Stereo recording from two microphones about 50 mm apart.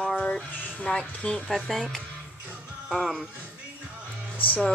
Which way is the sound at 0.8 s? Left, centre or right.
Centre.